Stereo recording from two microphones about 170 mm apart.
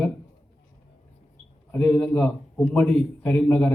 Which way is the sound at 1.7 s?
10° left (ahead or behind).